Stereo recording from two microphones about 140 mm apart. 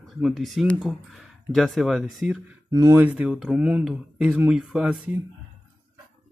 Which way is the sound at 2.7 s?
25° right (ahead or behind).